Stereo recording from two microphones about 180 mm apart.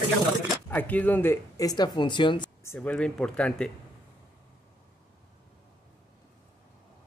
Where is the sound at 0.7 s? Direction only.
10° left (ahead or behind); by 2.5 s 25° left (ahead or behind).